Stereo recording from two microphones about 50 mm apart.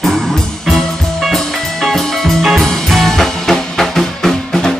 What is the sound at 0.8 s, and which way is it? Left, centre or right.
Music, centre.